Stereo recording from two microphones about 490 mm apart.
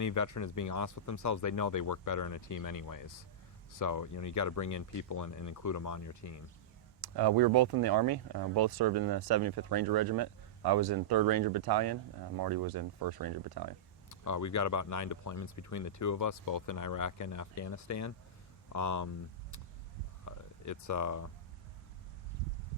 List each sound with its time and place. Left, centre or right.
0.0 s speech: left
7.0 s speech: right
14.1 s speech: left
20.2 s a sound: left